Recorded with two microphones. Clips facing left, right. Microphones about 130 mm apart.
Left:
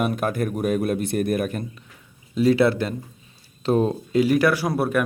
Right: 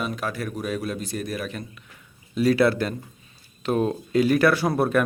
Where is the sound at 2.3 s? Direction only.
20° left (ahead or behind).